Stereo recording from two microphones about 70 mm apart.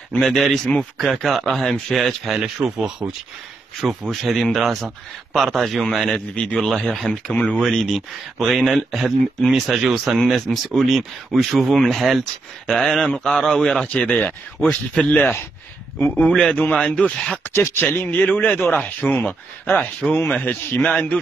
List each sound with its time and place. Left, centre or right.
0.2 s speech: centre
3.8 s speech: centre
6.3 s speech: centre
10.1 s speech: centre; by 15.4 s left
16.1 s speech: centre
17.4 s speech: left